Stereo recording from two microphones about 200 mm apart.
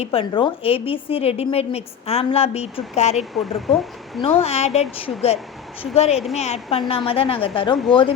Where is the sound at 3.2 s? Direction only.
Centre (ahead or behind).